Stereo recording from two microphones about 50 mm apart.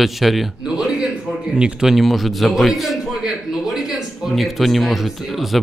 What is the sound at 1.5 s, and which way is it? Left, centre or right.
Speech, centre.